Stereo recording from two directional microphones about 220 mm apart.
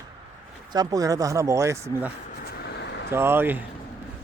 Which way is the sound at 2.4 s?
45° left (ahead or behind).